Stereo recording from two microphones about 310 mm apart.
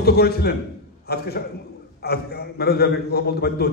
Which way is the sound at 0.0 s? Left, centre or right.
Left.